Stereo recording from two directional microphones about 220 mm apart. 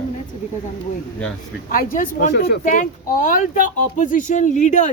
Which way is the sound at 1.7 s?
40° left (ahead or behind).